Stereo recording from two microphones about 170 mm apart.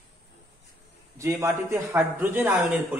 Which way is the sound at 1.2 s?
20° right (ahead or behind).